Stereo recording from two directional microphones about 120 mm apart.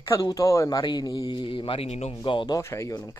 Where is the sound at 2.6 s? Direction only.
25° left (ahead or behind).